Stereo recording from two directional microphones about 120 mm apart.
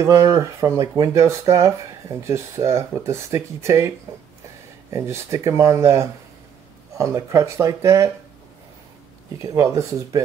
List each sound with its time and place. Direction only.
0.0 s speech: 25° right (ahead or behind)
4.9 s speech: 25° right (ahead or behind)
9.4 s speech: 25° right (ahead or behind)